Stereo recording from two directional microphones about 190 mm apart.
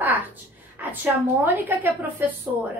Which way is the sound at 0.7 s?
10° right (ahead or behind).